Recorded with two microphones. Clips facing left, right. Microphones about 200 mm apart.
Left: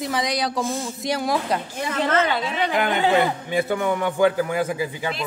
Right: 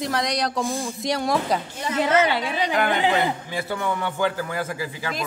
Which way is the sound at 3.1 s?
20° left (ahead or behind).